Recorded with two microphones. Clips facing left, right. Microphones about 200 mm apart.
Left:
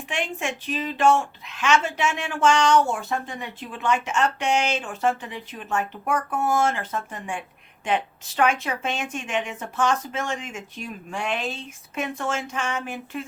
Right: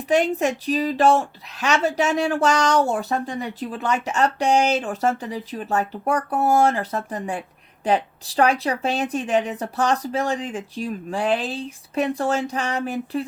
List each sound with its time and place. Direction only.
0.1 s a woman's voice: 40° right (ahead or behind)